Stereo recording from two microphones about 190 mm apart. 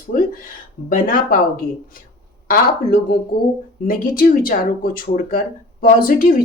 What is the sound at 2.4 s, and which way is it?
Speech, 50° left (ahead or behind).